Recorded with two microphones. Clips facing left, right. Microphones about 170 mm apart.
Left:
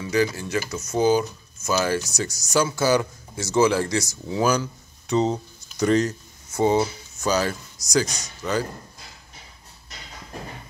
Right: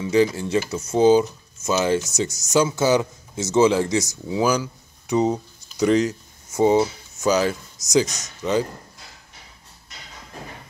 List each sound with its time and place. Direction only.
0.0 s speech: 25° right (ahead or behind)